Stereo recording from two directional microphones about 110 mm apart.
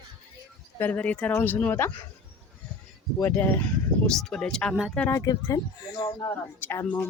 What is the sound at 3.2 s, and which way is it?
Speech, 20° left (ahead or behind).